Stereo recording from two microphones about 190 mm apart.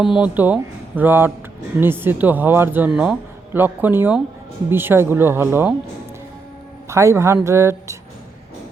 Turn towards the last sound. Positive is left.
turn(degrees=-15)  # may be behind; listen again after turning